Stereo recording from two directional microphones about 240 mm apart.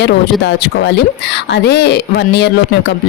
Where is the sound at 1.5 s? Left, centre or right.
Left.